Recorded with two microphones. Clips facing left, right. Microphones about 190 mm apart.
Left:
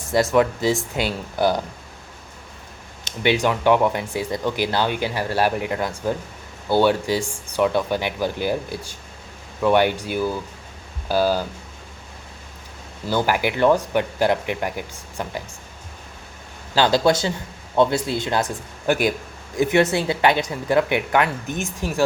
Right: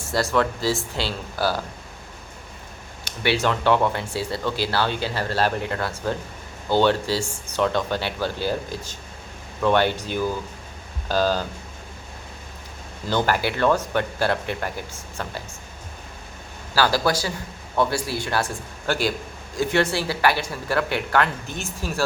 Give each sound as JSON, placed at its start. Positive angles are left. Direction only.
{"t": 0.1, "sound": "speech", "side_deg": 20}
{"t": 3.0, "sound": "speech", "side_deg": 15}
{"t": 13.1, "sound": "speech", "side_deg": 10}
{"t": 16.7, "sound": "speech", "side_deg": 20}